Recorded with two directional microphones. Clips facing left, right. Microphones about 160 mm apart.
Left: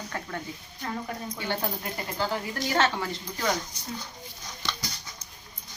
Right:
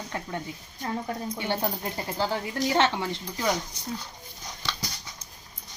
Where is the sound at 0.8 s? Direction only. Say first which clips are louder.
Right 3 dB; 30° right (ahead or behind).